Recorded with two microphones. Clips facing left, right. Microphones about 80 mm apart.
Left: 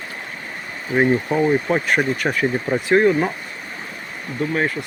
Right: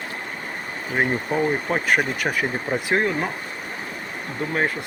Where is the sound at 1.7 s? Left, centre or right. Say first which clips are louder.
Left 3 dB; centre.